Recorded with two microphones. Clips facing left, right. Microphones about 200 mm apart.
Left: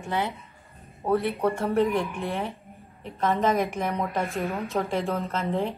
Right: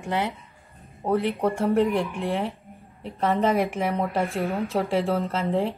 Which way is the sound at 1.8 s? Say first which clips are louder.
Right 2 dB; 30° right (ahead or behind).